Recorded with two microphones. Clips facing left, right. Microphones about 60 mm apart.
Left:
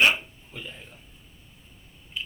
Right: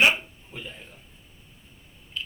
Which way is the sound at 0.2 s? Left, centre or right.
Centre.